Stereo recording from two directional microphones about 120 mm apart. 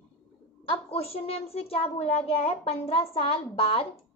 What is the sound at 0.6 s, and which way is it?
A woman's voice, 55° left (ahead or behind).